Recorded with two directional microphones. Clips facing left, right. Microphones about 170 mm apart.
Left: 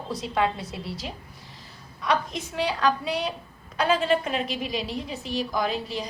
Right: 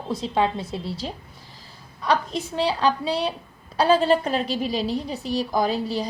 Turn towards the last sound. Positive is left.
turn(degrees=-35)  # may be behind; listen again after turning